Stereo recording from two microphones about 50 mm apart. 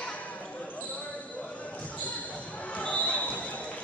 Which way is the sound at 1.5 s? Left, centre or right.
Left.